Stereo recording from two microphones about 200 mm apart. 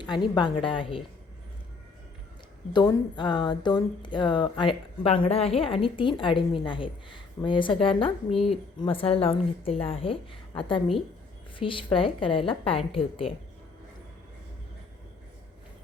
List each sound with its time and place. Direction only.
0.0 s speech: 20° left (ahead or behind)
2.7 s speech: 20° left (ahead or behind)